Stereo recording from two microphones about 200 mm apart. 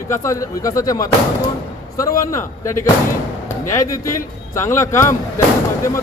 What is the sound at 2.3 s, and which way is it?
Speech, 15° left (ahead or behind).